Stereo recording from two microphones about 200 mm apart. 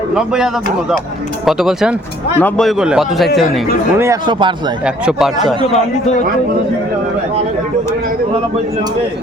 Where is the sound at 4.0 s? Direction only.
20° right (ahead or behind).